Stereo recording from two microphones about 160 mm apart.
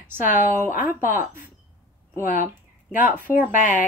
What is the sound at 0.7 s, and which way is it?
Speech, 55° left (ahead or behind).